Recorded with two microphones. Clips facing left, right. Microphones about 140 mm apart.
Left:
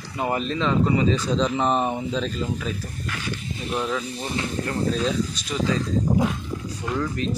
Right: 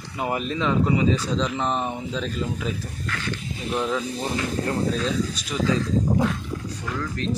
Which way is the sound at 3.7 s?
5° right (ahead or behind).